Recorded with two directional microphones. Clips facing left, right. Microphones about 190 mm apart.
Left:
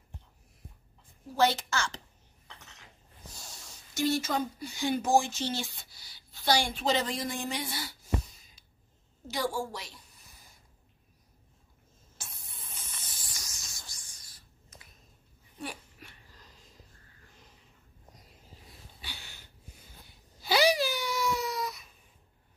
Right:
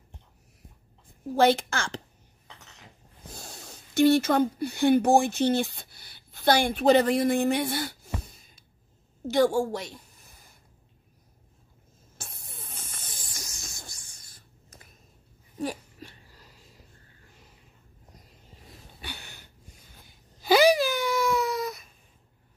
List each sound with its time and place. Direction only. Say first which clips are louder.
1.3 s a woman's voice: right 5 dB; 55° right (ahead or behind)
3.3 s a woman's voice: right 6 dB; 55° right (ahead or behind)
12.2 s spray: right 5 dB; 55° right (ahead or behind)
15.6 s a sound: right 9 dB; 35° right (ahead or behind)
18.9 s a sound: right 7 dB; 55° right (ahead or behind)
20.4 s wail: right 6 dB; 50° right (ahead or behind)